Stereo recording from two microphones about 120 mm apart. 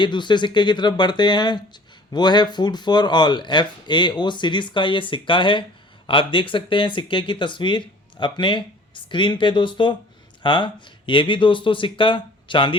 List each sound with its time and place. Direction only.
0.0 s speech: 40° left (ahead or behind)